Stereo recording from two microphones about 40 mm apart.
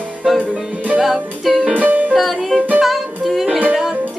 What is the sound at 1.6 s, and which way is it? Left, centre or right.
Music, right.